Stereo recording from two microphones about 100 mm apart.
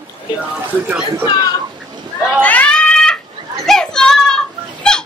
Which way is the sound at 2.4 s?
15° left (ahead or behind).